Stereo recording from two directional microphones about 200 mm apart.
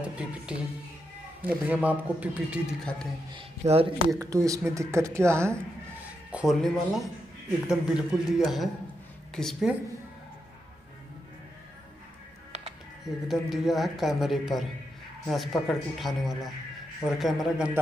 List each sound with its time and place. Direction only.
0.0 s a man's voice: 5° right (ahead or behind)
3.3 s speech: 30° right (ahead or behind)
4.2 s a man's voice: 15° right (ahead or behind)
6.3 s speech: centre (ahead or behind)
13.0 s speech: centre (ahead or behind)